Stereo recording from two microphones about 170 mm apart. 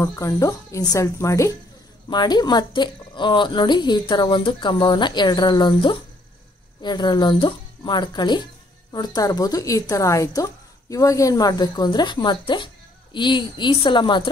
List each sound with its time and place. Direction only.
0.0 s a woman's voice: 15° left (ahead or behind)